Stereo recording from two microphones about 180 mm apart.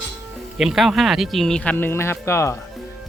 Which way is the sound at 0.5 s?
Centre (ahead or behind).